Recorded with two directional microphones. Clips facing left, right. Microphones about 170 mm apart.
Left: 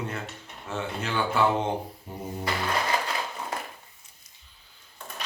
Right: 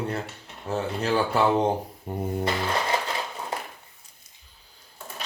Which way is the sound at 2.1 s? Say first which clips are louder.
Right 10 dB; 55° right (ahead or behind).